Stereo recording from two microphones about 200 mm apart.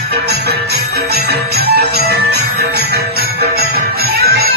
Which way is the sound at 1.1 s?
55° right (ahead or behind).